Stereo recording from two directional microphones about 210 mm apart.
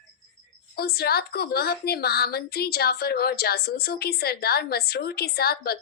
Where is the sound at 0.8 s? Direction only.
50° left (ahead or behind).